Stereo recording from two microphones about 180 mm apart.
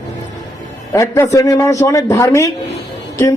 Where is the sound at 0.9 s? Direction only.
15° left (ahead or behind).